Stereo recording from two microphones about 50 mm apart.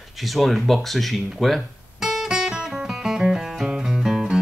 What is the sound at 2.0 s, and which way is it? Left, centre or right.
Music, centre.